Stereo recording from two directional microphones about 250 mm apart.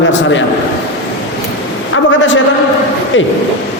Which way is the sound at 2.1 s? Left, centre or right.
Left.